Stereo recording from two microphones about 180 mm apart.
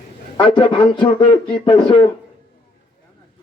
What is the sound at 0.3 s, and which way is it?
Speech, 30° left (ahead or behind).